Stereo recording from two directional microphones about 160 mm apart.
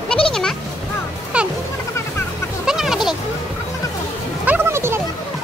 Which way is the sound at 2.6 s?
5° right (ahead or behind).